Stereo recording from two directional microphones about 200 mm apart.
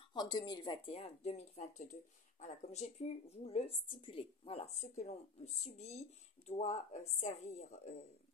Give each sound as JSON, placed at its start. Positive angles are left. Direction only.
{"t": 0.1, "sound": "speech", "side_deg": 20}